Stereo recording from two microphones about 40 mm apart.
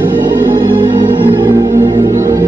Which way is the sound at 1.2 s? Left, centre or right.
Right.